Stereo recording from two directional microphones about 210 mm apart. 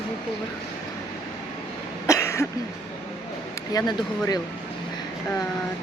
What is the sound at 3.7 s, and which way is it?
Speech, 20° left (ahead or behind).